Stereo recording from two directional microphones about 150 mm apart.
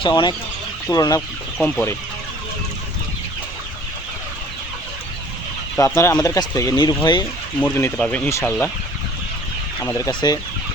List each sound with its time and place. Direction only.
0.0 s speech: 30° left (ahead or behind)
1.6 s speech: 10° left (ahead or behind)
5.7 s speech: 15° left (ahead or behind)
7.6 s speech: 15° left (ahead or behind)
8.3 s speech: 20° left (ahead or behind)
9.8 s speech: 15° left (ahead or behind)
10.1 s speech: 30° left (ahead or behind)